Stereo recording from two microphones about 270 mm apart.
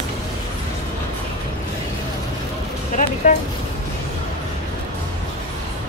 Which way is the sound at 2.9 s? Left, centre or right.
Left.